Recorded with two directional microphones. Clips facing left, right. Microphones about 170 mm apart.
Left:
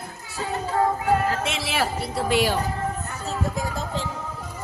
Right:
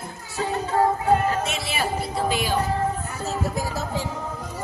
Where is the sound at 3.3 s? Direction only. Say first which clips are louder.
Even; 5° right (ahead or behind).